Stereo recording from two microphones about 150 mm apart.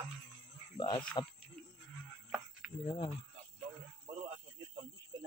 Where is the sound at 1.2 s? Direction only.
30° left (ahead or behind).